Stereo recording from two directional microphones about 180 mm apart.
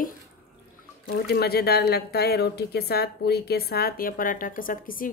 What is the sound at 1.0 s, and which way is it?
A woman's voice, 60° left (ahead or behind).